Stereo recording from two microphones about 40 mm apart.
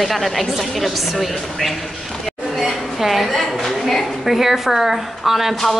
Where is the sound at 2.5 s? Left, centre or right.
Centre.